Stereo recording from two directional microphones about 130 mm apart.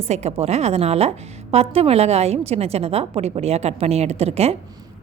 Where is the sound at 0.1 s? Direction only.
55° right (ahead or behind).